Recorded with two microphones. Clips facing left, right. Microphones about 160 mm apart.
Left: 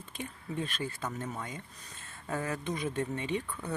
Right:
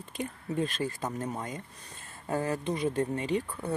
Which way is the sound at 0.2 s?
40° right (ahead or behind).